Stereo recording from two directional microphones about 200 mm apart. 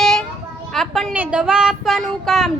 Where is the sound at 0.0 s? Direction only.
Centre (ahead or behind).